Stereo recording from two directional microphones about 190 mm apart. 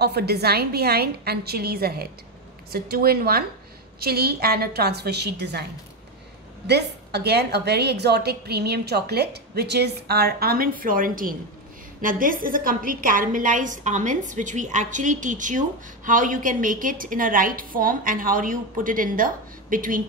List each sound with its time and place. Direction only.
0.0 s a woman's voice: 55° right (ahead or behind)
6.7 s a woman's voice: 60° right (ahead or behind)